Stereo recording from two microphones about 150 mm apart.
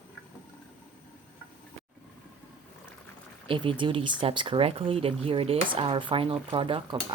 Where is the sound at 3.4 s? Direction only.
35° right (ahead or behind).